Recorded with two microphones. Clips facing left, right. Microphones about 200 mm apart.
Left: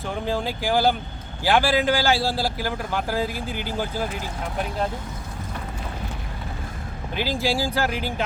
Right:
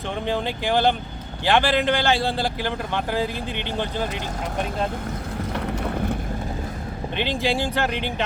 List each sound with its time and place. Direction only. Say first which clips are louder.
0.3 s a man's voice: right 1 dB; centre (ahead or behind)
5.5 s vehicle: right 9 dB; 65° right (ahead or behind)
7.2 s a man's voice: even; centre (ahead or behind)